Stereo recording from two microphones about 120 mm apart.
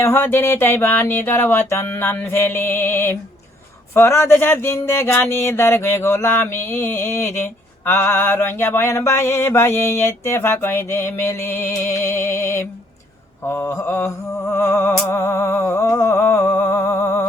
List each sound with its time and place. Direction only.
0.0 s speech: 20° left (ahead or behind)